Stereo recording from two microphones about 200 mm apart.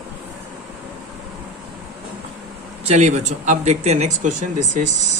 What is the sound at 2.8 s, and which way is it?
Speech, 35° right (ahead or behind).